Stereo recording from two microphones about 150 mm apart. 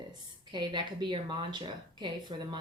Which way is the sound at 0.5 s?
30° right (ahead or behind).